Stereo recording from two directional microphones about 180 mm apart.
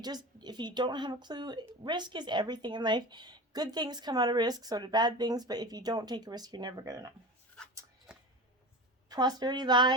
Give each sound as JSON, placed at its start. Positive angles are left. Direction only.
{"t": 0.0, "sound": "a woman's voice", "side_deg": -25}
{"t": 8.1, "sound": "a sound", "side_deg": -5}
{"t": 9.0, "sound": "a woman's voice", "side_deg": -20}